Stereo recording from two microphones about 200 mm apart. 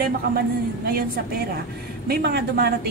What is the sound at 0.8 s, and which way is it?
A woman's voice, 50° right (ahead or behind).